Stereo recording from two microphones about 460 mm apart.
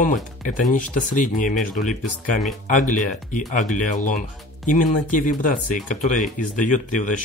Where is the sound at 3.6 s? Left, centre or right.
Left.